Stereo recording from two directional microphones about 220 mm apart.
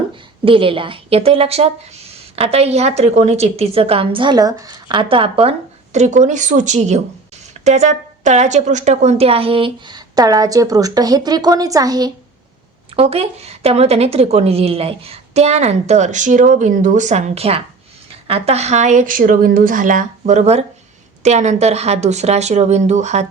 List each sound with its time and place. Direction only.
0.4 s a woman's voice: 25° right (ahead or behind)